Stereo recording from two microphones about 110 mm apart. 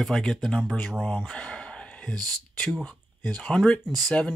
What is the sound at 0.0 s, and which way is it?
Speech, 5° left (ahead or behind).